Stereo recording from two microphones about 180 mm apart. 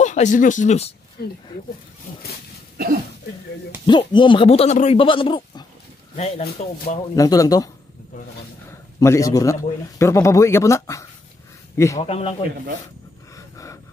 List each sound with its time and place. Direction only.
0.0 s speech: 40° left (ahead or behind)
1.2 s speech: 60° left (ahead or behind)
3.8 s speech: 25° left (ahead or behind)
7.2 s speech: 20° left (ahead or behind)
9.0 s speech: 15° left (ahead or behind)
12.0 s a man's voice: 35° left (ahead or behind)